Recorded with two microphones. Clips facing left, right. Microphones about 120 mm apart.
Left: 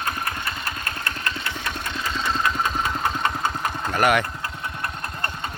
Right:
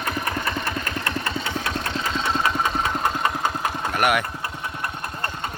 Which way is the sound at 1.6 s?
90° right.